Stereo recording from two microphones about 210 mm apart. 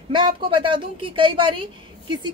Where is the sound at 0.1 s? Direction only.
25° right (ahead or behind).